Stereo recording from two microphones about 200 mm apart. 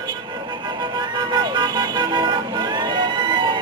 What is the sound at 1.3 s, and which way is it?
Vehicle, 20° right (ahead or behind).